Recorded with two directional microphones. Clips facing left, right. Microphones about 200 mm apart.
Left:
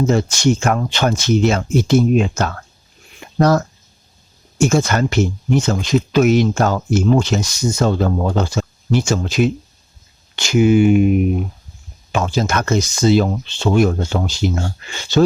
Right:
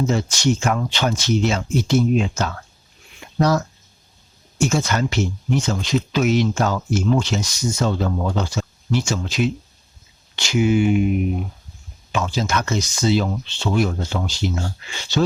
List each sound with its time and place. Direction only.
0.1 s speech: 50° left (ahead or behind)
3.2 s a sound: 50° left (ahead or behind)
4.5 s speech: 45° left (ahead or behind)